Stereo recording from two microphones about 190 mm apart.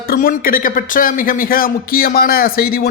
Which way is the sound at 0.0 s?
50° left (ahead or behind).